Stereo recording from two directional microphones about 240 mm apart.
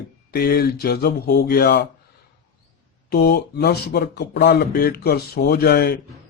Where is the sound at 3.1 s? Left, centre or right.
Left.